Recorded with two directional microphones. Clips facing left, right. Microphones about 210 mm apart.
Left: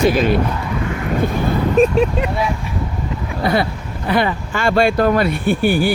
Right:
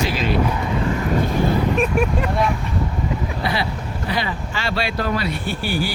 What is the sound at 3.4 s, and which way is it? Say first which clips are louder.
Speech: left 9 dB; 45° left (ahead or behind).